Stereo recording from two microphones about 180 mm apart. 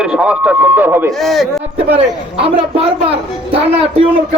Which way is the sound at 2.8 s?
30° right (ahead or behind).